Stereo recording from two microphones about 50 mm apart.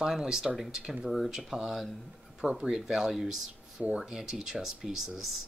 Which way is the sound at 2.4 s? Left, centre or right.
Centre.